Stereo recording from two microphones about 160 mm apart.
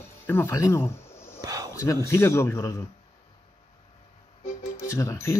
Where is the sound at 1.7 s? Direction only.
20° left (ahead or behind).